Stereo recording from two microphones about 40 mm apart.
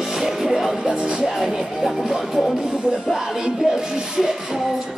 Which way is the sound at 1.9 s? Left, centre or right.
Centre.